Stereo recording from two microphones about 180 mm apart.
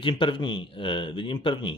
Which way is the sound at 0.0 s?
25° left (ahead or behind).